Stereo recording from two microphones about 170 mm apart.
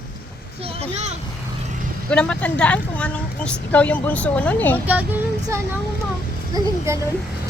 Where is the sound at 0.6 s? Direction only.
40° right (ahead or behind).